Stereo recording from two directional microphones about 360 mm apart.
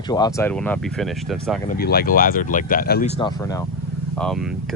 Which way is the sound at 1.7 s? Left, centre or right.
Left.